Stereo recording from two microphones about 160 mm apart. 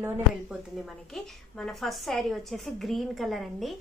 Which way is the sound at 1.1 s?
5° left (ahead or behind).